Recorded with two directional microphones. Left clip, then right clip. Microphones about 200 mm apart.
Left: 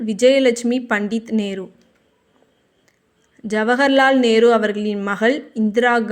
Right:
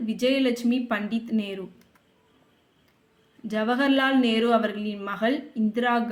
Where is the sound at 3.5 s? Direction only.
40° left (ahead or behind).